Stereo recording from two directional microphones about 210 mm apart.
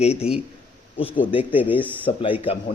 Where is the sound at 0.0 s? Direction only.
30° left (ahead or behind).